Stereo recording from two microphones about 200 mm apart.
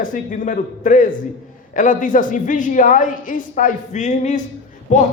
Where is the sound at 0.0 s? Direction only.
40° left (ahead or behind).